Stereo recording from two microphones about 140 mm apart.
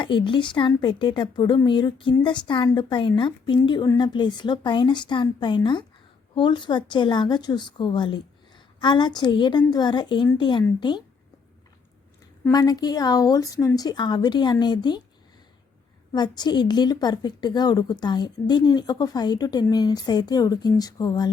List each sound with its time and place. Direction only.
0.0 s a woman's voice: 35° left (ahead or behind)
12.5 s a woman's voice: 25° left (ahead or behind)
16.1 s a woman's voice: 30° left (ahead or behind)